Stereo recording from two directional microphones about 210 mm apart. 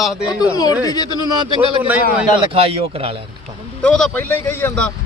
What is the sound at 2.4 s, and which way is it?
Speech, 25° right (ahead or behind).